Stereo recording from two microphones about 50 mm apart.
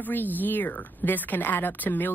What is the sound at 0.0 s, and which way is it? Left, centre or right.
Speech, left.